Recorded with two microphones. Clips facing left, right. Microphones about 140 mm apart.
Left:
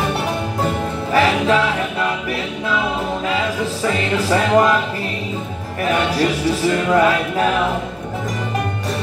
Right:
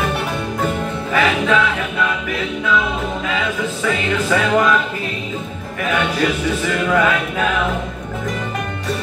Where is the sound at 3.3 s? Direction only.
35° left (ahead or behind).